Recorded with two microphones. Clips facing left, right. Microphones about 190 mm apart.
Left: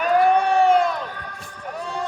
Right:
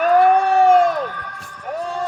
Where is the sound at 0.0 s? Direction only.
45° right (ahead or behind).